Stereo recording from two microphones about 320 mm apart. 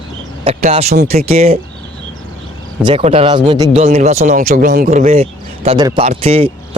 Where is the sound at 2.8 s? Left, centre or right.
Centre.